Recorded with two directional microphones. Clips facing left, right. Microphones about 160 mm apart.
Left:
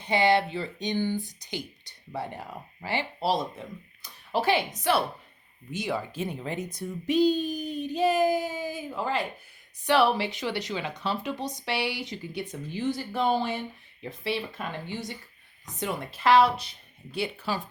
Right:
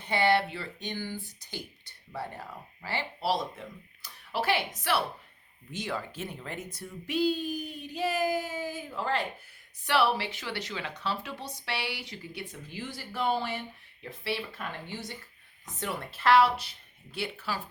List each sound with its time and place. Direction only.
0.0 s a woman's voice: 15° left (ahead or behind)